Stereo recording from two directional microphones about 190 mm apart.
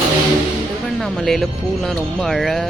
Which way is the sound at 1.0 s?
Centre (ahead or behind).